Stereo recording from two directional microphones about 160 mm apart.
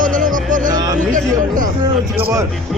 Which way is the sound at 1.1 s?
55° right (ahead or behind).